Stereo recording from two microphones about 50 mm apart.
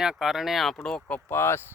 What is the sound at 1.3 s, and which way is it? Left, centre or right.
Speech, left.